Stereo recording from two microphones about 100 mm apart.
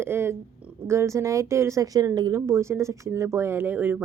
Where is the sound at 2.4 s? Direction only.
30° right (ahead or behind).